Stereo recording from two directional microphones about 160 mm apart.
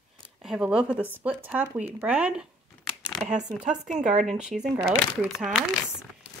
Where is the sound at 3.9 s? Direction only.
50° right (ahead or behind).